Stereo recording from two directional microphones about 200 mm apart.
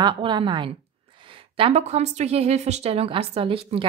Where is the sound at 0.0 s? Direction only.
25° right (ahead or behind).